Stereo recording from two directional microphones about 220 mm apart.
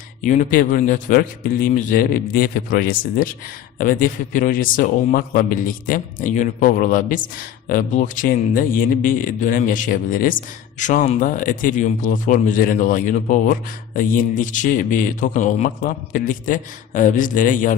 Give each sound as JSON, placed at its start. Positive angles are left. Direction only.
{"t": 0.2, "sound": "speech", "side_deg": 35}